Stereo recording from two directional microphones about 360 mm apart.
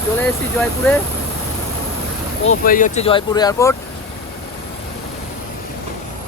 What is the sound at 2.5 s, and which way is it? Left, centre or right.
Speech, left.